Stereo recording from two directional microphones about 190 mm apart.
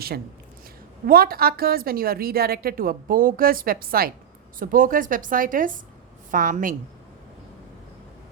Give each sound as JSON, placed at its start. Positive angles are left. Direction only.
{"t": 1.0, "sound": "a woman's voice", "side_deg": -50}